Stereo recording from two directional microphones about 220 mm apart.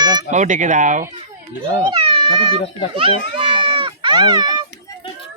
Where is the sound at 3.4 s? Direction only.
25° right (ahead or behind).